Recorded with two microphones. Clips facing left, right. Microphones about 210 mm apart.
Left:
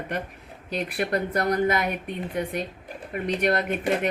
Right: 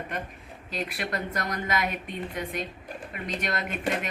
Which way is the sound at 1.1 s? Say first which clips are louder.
Left 9 dB; 35° left (ahead or behind).